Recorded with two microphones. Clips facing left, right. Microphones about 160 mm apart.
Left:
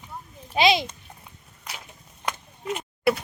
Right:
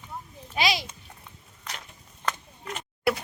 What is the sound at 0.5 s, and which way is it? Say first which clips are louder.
Speech: left 7 dB; 25° left (ahead or behind).